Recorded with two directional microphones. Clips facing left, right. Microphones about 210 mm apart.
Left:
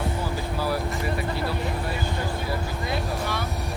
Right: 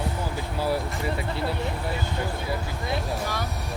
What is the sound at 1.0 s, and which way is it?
Speech, 25° right (ahead or behind).